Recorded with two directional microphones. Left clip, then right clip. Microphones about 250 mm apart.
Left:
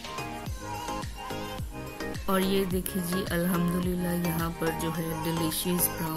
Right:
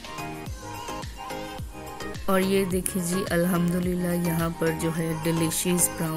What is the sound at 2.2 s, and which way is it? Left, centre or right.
A woman's voice, centre.